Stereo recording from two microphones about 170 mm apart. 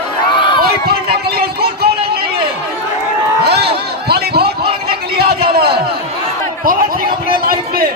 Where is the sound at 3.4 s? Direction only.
70° right (ahead or behind).